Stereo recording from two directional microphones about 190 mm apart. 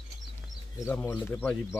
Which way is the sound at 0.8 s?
10° left (ahead or behind).